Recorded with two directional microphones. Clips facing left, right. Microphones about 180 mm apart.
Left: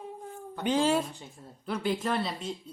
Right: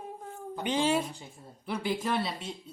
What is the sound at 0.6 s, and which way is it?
A woman's voice, centre (ahead or behind).